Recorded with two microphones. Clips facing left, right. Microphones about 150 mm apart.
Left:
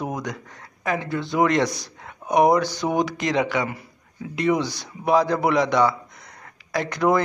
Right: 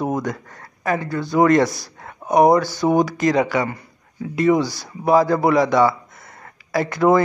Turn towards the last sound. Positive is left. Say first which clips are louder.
# right 4 dB
turn(degrees=-5)  # may be behind; listen again after turning